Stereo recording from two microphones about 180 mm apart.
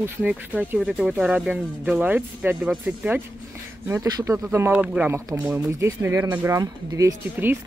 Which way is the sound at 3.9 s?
20° right (ahead or behind).